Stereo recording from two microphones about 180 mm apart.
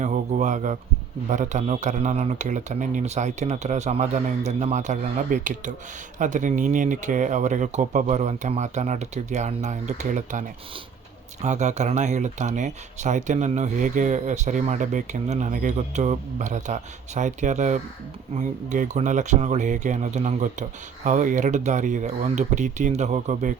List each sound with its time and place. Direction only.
0.0 s speech: 40° right (ahead or behind)
11.4 s speech: 40° right (ahead or behind)